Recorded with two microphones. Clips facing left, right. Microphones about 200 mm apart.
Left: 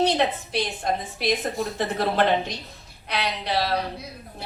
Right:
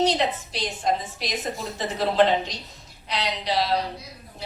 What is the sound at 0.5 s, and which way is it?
A woman's voice, 55° left (ahead or behind).